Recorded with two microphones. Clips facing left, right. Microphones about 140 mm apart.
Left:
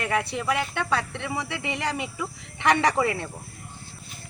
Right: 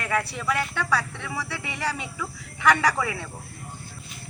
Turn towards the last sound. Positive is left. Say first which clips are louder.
# left 2 dB
turn(degrees=20)  # may be behind; listen again after turning